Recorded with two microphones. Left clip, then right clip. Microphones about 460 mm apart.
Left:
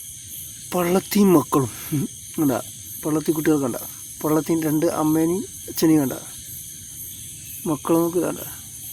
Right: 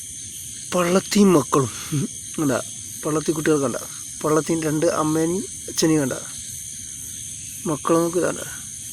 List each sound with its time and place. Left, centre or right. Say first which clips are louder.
0.7 s speech: right 2 dB; left
7.6 s speech: right 1 dB; left